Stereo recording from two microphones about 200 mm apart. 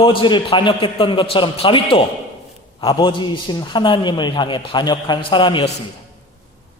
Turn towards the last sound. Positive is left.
turn(degrees=25)  # may be behind; listen again after turning